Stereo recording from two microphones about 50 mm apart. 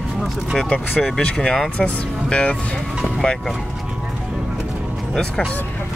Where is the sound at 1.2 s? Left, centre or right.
Centre.